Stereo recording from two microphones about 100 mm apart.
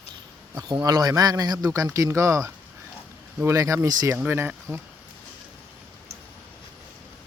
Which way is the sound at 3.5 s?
30° right (ahead or behind).